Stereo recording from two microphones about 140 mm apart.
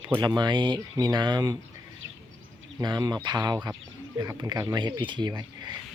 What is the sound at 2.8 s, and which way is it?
Speech, 30° right (ahead or behind).